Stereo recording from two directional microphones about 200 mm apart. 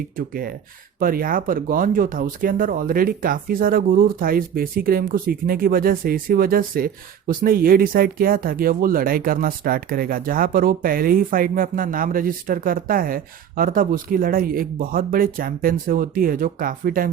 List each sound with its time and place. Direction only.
0.2 s speech: 45° right (ahead or behind)